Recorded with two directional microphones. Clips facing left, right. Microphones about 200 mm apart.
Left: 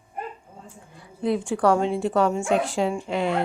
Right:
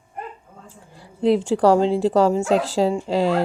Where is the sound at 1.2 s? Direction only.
25° right (ahead or behind).